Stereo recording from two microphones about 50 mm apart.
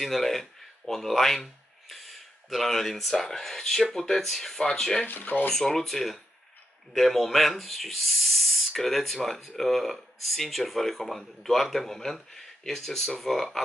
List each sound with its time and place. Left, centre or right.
0.0 s speech: centre
5.0 s speech: left
5.5 s a man's voice: centre